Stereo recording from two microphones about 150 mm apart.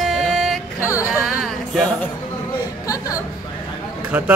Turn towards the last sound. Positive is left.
turn(degrees=-10)  # may be behind; listen again after turning